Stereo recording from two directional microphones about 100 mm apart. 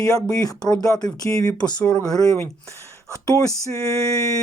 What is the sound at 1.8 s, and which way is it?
Speech, 10° left (ahead or behind).